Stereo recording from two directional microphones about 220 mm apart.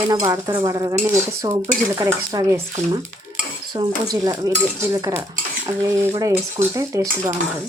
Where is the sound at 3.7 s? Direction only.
20° right (ahead or behind).